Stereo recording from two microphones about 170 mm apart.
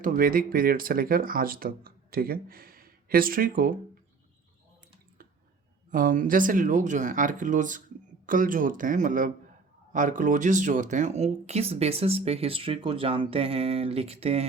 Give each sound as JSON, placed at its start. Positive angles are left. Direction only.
{"t": 0.0, "sound": "speech", "side_deg": -55}
{"t": 5.9, "sound": "speech", "side_deg": -55}